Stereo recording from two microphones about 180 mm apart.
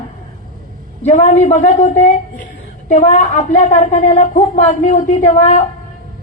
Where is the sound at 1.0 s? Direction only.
40° left (ahead or behind).